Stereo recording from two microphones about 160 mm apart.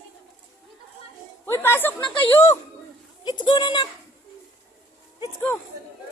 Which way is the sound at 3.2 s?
30° left (ahead or behind).